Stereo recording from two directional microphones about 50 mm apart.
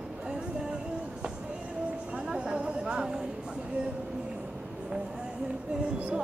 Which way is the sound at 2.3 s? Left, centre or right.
Centre.